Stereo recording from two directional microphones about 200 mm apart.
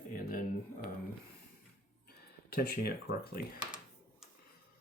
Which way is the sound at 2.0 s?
50° left (ahead or behind).